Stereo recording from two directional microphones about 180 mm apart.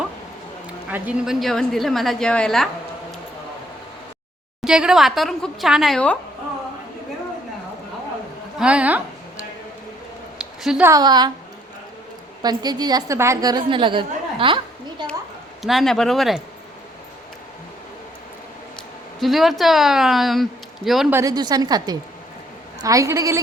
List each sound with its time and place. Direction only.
0.9 s speech: 10° right (ahead or behind)
4.6 s speech: 5° right (ahead or behind)
8.5 s a woman's voice: 5° right (ahead or behind)
10.6 s speech: 5° right (ahead or behind)
10.8 s a woman's voice: 20° right (ahead or behind)
12.4 s a woman's voice: 20° right (ahead or behind)
15.6 s speech: centre (ahead or behind)
19.2 s speech: centre (ahead or behind)
21.1 s a woman's voice: 15° right (ahead or behind)